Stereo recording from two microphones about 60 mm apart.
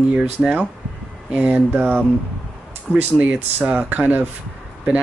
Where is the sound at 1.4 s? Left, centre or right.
Right.